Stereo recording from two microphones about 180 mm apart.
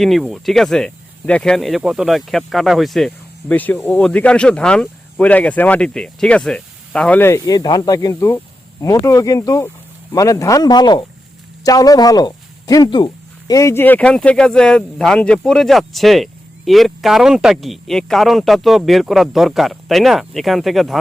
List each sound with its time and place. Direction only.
0.0 s speech: centre (ahead or behind)